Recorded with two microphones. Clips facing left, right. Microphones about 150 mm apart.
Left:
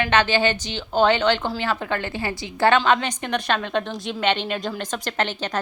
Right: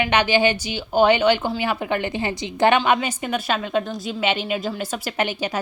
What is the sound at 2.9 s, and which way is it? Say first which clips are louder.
A woman's voice: even; 5° right (ahead or behind).